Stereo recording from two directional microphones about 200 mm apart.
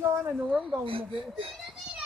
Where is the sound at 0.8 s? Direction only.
25° right (ahead or behind).